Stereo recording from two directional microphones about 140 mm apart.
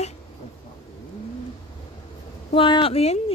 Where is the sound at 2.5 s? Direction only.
40° left (ahead or behind).